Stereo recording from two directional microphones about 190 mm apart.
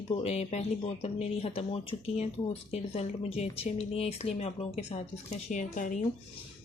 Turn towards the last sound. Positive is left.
turn(degrees=40)  # may be behind; listen again after turning